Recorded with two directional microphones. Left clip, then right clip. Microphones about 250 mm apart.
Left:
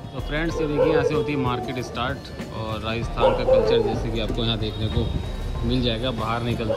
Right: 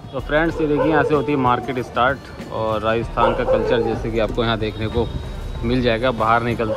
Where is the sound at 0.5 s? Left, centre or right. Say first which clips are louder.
Right 3 dB; centre.